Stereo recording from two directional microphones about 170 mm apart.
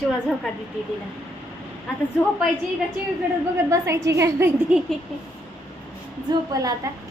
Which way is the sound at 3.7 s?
20° right (ahead or behind).